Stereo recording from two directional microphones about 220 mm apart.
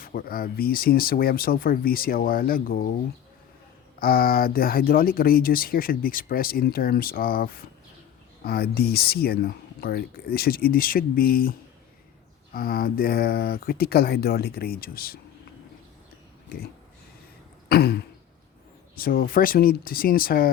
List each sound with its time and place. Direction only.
0.0 s speech: 40° left (ahead or behind)
4.0 s speech: 40° left (ahead or behind)
12.5 s speech: 40° left (ahead or behind)
17.7 s throat clearing: 45° left (ahead or behind)
18.9 s speech: 40° left (ahead or behind)